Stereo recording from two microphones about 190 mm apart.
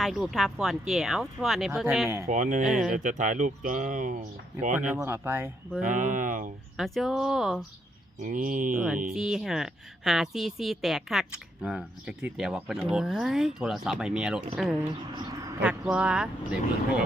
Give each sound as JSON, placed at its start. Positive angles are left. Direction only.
{"t": 0.0, "sound": "a woman's voice", "side_deg": 0}
{"t": 2.3, "sound": "speech", "side_deg": -45}
{"t": 2.6, "sound": "a woman's voice", "side_deg": 0}
{"t": 2.9, "sound": "speech", "side_deg": -40}
{"t": 4.9, "sound": "speech", "side_deg": -10}
{"t": 5.8, "sound": "speech", "side_deg": -45}
{"t": 6.7, "sound": "a woman's voice", "side_deg": 0}
{"t": 8.2, "sound": "speech", "side_deg": -45}
{"t": 8.7, "sound": "a woman's voice", "side_deg": -5}